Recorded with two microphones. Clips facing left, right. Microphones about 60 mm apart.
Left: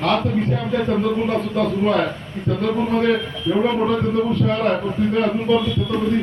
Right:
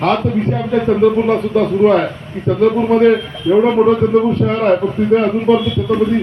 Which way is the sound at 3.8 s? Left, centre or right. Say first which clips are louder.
Right 7 dB; right.